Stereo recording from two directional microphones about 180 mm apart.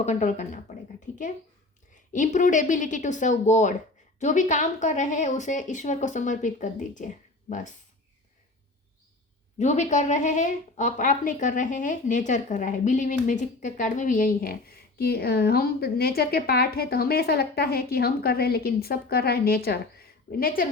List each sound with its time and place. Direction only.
0.0 s speech: 40° left (ahead or behind)
2.1 s a woman's voice: 45° left (ahead or behind)
9.6 s speech: 40° left (ahead or behind); by 20.5 s 55° left (ahead or behind)